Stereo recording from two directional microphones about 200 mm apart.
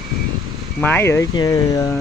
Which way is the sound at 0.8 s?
10° left (ahead or behind).